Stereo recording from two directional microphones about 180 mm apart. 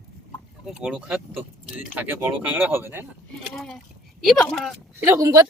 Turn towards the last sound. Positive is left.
turn(degrees=-20)  # may be behind; listen again after turning